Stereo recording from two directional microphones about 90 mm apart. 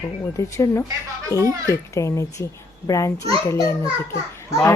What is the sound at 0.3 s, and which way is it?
A child's voice, 35° left (ahead or behind).